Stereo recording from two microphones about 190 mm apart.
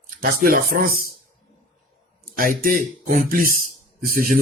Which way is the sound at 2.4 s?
45° right (ahead or behind).